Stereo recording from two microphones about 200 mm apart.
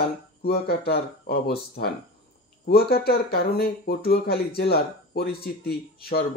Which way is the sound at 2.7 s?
50° left (ahead or behind).